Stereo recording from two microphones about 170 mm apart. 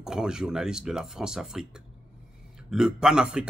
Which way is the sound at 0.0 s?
5° right (ahead or behind).